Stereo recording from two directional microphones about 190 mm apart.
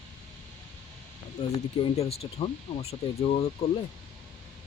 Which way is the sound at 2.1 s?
30° left (ahead or behind).